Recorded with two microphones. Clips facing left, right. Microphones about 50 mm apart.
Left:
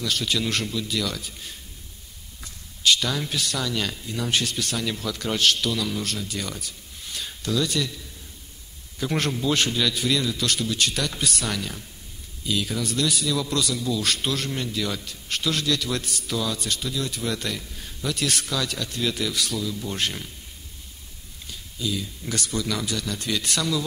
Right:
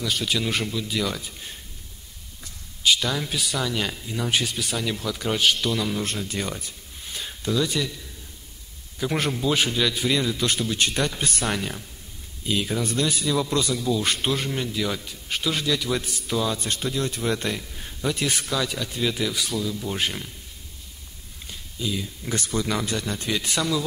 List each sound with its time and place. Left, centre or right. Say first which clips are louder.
0.0 s speech: even; centre
2.8 s speech: even; centre
9.0 s a man's voice: right 1 dB; centre
21.7 s a man's voice: even; centre